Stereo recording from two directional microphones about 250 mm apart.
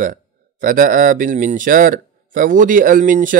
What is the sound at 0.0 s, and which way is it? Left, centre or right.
Speech, right.